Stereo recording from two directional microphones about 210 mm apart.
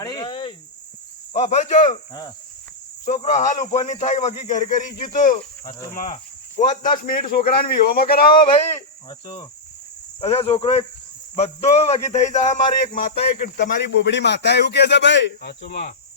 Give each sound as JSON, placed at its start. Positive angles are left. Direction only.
{"t": 0.0, "sound": "cricket", "side_deg": 20}
{"t": 1.3, "sound": "speech", "side_deg": 30}
{"t": 3.1, "sound": "speech", "side_deg": 35}
{"t": 9.0, "sound": "speech", "side_deg": 20}
{"t": 11.3, "sound": "speech", "side_deg": 30}
{"t": 13.1, "sound": "speech", "side_deg": 50}